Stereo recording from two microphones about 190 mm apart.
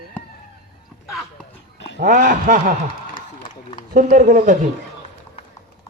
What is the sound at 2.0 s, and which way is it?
Speech, 45° right (ahead or behind).